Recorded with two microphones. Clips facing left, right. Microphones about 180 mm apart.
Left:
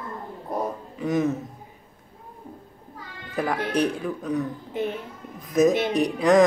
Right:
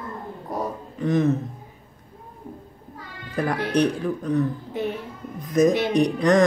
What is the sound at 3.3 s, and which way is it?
Speech, centre (ahead or behind).